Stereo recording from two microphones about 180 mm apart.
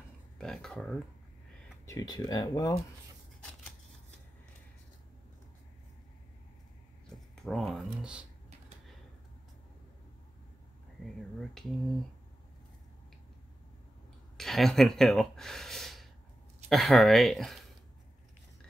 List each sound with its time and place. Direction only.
0.4 s speech: 5° left (ahead or behind)
1.9 s speech: 20° left (ahead or behind)
7.4 s speech: centre (ahead or behind)
11.3 s speech: centre (ahead or behind)
14.3 s speech: centre (ahead or behind)